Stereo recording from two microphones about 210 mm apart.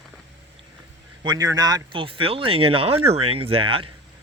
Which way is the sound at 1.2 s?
20° right (ahead or behind).